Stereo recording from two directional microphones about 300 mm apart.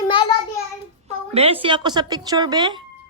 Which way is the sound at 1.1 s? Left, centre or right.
Centre.